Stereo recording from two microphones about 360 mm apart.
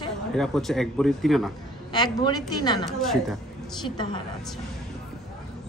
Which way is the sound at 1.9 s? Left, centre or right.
Centre.